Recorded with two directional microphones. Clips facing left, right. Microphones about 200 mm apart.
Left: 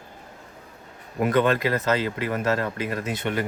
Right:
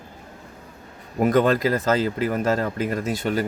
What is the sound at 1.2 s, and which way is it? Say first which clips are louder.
Speech: right 3 dB; 35° right (ahead or behind).